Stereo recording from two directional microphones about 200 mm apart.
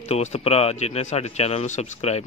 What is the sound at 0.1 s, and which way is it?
Speech, 30° left (ahead or behind).